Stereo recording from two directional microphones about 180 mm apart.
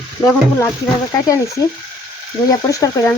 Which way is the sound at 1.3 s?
20° left (ahead or behind).